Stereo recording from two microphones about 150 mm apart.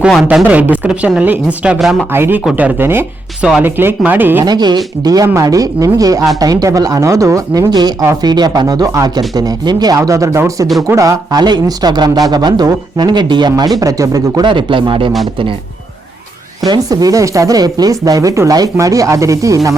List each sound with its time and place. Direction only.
0.0 s speech: 5° right (ahead or behind)
2.1 s speech: 15° right (ahead or behind)
4.4 s speech: 30° right (ahead or behind)
16.6 s speech: 25° right (ahead or behind)